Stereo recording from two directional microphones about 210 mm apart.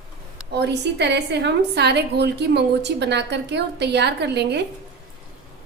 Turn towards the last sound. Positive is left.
turn(degrees=-55)  # may be behind; listen again after turning